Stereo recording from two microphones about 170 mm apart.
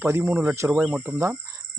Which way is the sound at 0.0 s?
10° right (ahead or behind).